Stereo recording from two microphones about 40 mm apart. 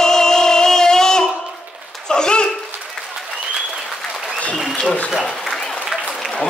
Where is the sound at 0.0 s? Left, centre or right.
Centre.